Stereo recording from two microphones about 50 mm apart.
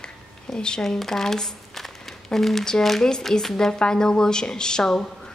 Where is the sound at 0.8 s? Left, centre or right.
Centre.